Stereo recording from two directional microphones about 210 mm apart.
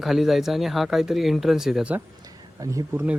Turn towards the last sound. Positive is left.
turn(degrees=-10)  # may be behind; listen again after turning